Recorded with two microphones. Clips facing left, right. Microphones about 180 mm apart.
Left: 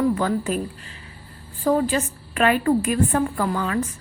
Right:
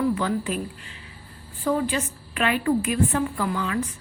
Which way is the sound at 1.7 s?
40° left (ahead or behind).